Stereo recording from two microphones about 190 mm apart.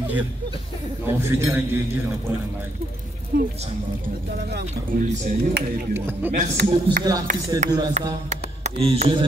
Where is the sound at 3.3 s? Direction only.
50° right (ahead or behind).